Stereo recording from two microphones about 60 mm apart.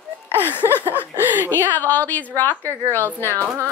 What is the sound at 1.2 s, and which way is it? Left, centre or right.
Speech, right.